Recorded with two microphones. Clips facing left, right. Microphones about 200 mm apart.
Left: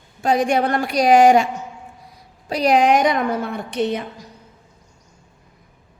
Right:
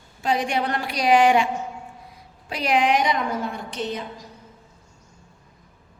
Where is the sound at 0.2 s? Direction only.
45° left (ahead or behind).